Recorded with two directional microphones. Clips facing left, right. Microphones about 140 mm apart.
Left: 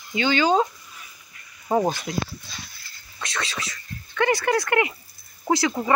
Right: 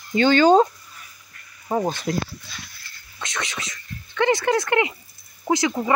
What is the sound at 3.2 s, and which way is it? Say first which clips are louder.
Speech: even; 20° right (ahead or behind).